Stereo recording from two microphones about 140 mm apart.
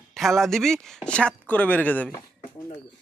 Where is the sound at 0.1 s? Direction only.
Centre (ahead or behind).